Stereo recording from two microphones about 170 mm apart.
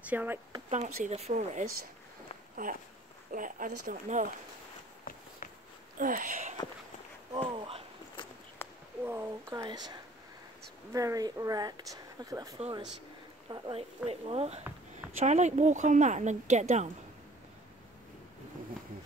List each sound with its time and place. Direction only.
0.0 s speech: 10° right (ahead or behind)
0.7 s a woman's voice: 45° right (ahead or behind)
5.1 s walk: 55° left (ahead or behind)
5.9 s a woman's voice: 55° right (ahead or behind)
7.3 s speech: 30° right (ahead or behind)
8.6 s cat: 15° left (ahead or behind)
9.0 s speech: 15° right (ahead or behind)
12.5 s a woman's voice: 35° right (ahead or behind)